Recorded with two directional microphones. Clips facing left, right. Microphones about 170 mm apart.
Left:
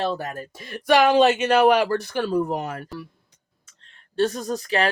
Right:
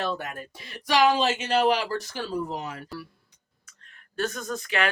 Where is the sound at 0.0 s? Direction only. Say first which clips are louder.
Left 4 dB; 35° left (ahead or behind); by 2.8 s 55° left (ahead or behind).